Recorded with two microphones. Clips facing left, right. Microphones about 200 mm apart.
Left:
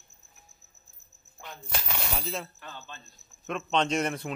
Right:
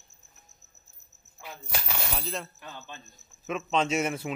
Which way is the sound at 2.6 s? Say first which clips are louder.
Right 1 dB; 15° right (ahead or behind).